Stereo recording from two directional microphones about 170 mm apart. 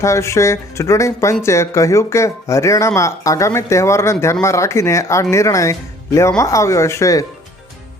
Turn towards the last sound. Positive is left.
turn(degrees=20)  # may be behind; listen again after turning